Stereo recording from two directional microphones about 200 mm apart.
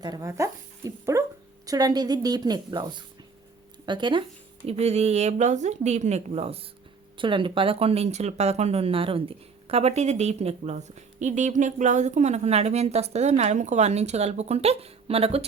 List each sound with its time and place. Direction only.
0.0 s a woman's voice: 20° right (ahead or behind)
3.8 s speech: 25° right (ahead or behind)